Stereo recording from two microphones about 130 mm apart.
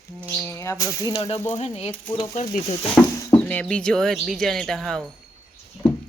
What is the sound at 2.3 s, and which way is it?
Speech, 65° left (ahead or behind).